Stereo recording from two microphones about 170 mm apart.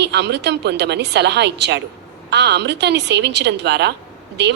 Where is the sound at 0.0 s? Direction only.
80° right.